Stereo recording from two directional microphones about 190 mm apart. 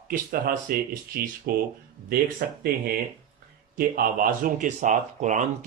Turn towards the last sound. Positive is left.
turn(degrees=-40)  # may be behind; listen again after turning